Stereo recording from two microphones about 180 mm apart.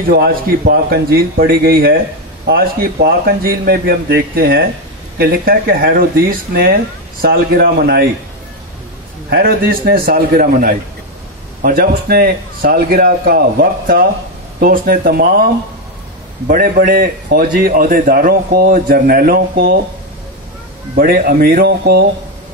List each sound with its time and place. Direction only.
0.1 s a man's voice: 55° right (ahead or behind)
9.3 s a man's voice: 55° right (ahead or behind)
20.9 s a man's voice: 55° right (ahead or behind)